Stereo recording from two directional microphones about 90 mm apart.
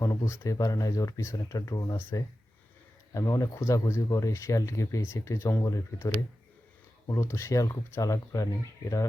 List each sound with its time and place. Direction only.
0.0 s speech: 35° left (ahead or behind)
3.2 s speech: 40° left (ahead or behind)
3.6 s speech: 30° left (ahead or behind)